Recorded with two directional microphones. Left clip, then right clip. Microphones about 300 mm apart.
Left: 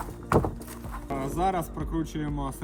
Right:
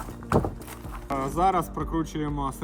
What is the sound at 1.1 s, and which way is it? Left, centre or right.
Speech, centre.